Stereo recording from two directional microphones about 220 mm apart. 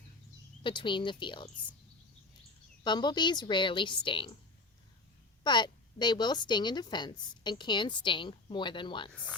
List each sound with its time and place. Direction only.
0.6 s a woman's voice: 20° left (ahead or behind)
2.8 s a woman's voice: 20° left (ahead or behind)
5.4 s a woman's voice: 20° left (ahead or behind)